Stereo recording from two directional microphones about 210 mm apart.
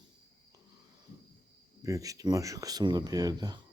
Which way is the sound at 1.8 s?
15° right (ahead or behind).